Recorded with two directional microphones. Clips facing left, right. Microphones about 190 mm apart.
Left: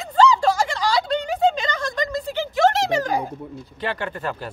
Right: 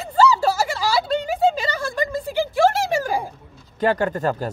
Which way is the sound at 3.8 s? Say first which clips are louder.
Right 7 dB; 45° right (ahead or behind).